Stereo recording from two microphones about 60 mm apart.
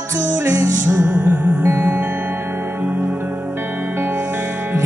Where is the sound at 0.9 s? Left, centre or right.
Right.